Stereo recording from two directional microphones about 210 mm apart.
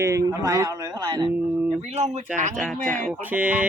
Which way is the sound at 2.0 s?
30° right (ahead or behind).